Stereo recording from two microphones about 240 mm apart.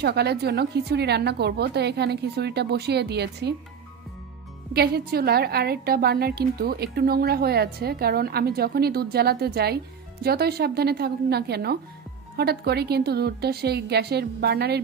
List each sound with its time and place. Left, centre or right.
0.0 s a woman's voice: right
4.7 s a woman's voice: right